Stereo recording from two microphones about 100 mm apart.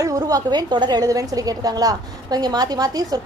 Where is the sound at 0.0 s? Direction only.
35° right (ahead or behind).